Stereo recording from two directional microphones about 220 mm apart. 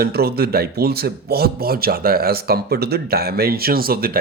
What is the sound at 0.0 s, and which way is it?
Speech, 45° right (ahead or behind).